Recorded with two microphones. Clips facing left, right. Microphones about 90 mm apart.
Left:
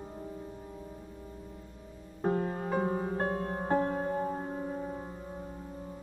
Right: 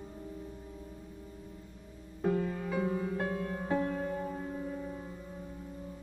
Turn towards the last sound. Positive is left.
turn(degrees=35)  # may be behind; listen again after turning